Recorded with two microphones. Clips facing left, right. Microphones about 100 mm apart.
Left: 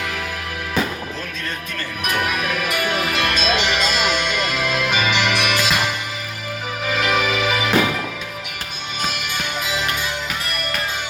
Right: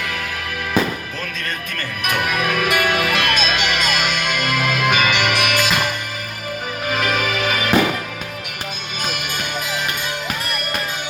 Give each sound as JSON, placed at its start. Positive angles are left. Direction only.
{"t": 2.0, "sound": "music", "side_deg": -65}
{"t": 6.8, "sound": "music", "side_deg": -50}